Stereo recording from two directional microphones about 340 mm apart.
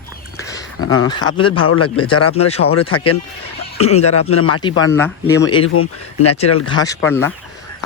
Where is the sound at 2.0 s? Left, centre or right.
Centre.